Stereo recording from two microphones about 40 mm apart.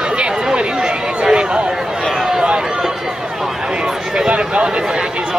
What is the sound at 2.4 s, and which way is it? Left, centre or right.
Run, centre.